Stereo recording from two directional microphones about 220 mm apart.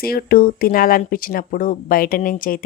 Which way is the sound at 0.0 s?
45° left (ahead or behind).